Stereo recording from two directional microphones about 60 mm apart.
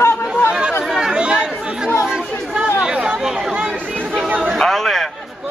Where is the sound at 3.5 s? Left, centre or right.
Right.